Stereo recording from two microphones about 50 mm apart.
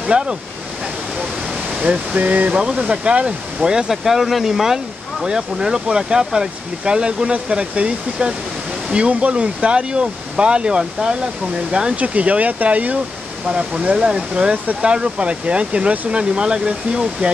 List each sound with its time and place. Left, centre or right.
0.0 s speech: centre
1.8 s speech: right
12.0 s speech: right